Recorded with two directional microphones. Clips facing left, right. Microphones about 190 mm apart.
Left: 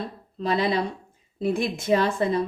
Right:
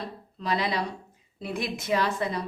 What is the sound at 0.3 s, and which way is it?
Speech, 30° left (ahead or behind).